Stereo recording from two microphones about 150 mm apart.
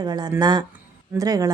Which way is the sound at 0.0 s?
30° right (ahead or behind).